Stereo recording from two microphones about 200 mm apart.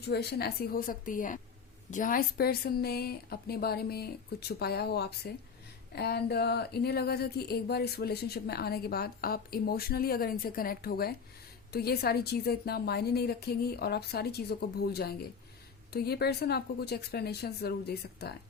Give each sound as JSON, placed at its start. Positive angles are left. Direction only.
{"t": 0.1, "sound": "speech", "side_deg": 55}